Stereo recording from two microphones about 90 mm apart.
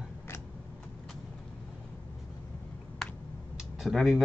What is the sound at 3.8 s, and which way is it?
Speech, 5° right (ahead or behind).